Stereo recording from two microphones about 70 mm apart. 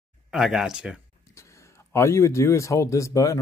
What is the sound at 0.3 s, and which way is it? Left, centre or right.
Speech, centre.